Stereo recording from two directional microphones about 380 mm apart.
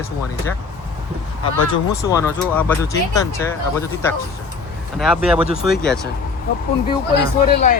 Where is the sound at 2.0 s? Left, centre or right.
Centre.